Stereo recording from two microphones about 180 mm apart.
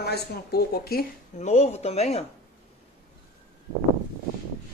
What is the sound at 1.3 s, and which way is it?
Speech, 40° left (ahead or behind).